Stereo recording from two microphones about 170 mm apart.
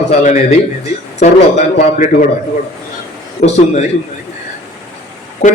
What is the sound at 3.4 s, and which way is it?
Speech, 50° left (ahead or behind).